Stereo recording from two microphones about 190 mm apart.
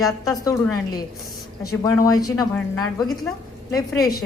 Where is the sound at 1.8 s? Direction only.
20° left (ahead or behind).